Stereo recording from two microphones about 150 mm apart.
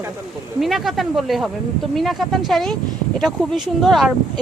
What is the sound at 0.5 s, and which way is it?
Speech, centre (ahead or behind).